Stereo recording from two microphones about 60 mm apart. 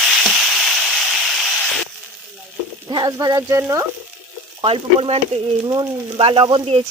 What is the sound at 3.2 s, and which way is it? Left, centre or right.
Speech, right.